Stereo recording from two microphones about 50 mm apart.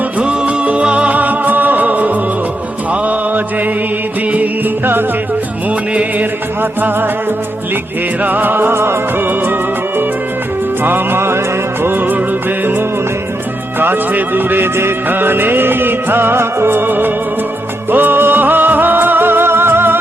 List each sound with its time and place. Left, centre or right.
0.2 s music: right
2.9 s mantra: right
4.3 s music: right
6.6 s music: right
10.8 s music: right